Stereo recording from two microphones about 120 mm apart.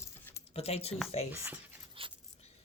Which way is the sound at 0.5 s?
55° left (ahead or behind).